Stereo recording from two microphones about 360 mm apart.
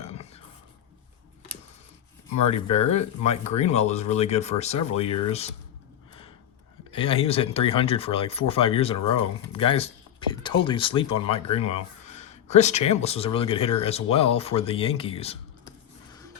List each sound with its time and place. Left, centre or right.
0.1 s a sound: centre
2.5 s speech: centre
6.9 s speech: centre